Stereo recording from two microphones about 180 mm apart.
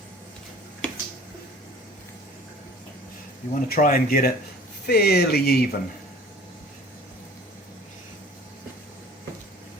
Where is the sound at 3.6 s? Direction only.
55° left (ahead or behind).